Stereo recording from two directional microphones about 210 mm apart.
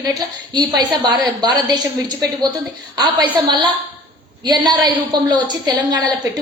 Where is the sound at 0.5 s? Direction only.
20° right (ahead or behind).